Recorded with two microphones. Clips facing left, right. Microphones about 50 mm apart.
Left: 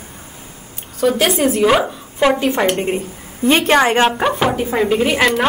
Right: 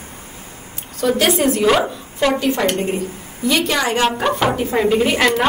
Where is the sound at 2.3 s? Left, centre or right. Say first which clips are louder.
Left 2 dB; left.